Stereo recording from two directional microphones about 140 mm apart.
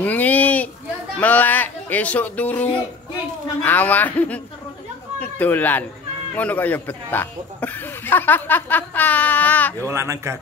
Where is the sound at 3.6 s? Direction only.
10° left (ahead or behind).